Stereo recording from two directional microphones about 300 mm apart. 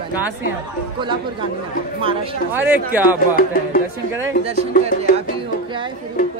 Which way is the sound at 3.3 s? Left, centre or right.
Left.